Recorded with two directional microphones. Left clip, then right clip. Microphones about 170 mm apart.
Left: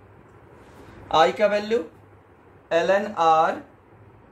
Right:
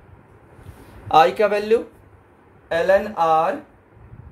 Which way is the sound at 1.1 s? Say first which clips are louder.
Right 4 dB; 45° right (ahead or behind).